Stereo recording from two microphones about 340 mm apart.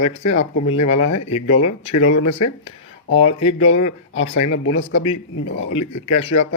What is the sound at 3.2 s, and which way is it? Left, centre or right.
Speech, centre.